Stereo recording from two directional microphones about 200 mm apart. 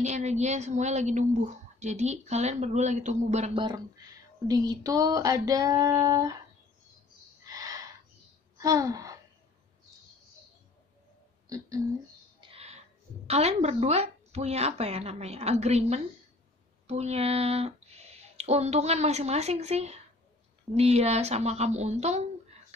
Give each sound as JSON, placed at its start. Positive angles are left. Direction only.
{"t": 0.0, "sound": "a woman's voice", "side_deg": -35}
{"t": 3.6, "sound": "speech", "side_deg": -20}
{"t": 4.5, "sound": "female singing", "side_deg": -20}
{"t": 7.4, "sound": "a sound", "side_deg": -20}
{"t": 8.5, "sound": "speech", "side_deg": -15}
{"t": 11.4, "sound": "speech", "side_deg": -15}
{"t": 12.4, "sound": "a sound", "side_deg": -30}
{"t": 13.3, "sound": "a woman's voice", "side_deg": -30}